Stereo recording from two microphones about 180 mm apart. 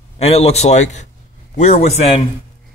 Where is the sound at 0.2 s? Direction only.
35° left (ahead or behind).